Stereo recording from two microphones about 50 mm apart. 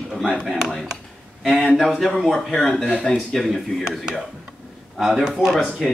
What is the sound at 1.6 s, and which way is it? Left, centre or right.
Speech, centre.